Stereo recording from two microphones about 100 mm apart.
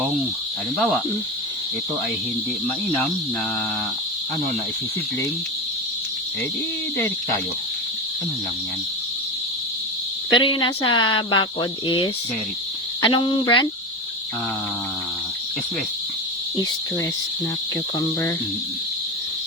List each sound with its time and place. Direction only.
0.8 s speech: 5° left (ahead or behind)
10.3 s speech: 55° left (ahead or behind)
13.0 s speech: 50° left (ahead or behind)
18.0 s speech: 30° left (ahead or behind)